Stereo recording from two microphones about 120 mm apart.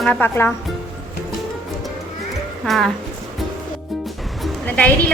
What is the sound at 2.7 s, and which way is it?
Speech, centre (ahead or behind).